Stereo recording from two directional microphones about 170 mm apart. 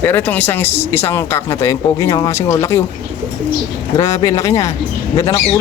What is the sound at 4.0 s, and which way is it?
Speech, 20° left (ahead or behind).